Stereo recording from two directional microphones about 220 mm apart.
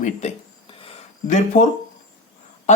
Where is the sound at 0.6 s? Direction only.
25° left (ahead or behind).